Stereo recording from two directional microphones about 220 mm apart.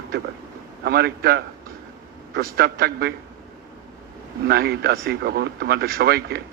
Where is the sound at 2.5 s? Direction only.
45° right (ahead or behind).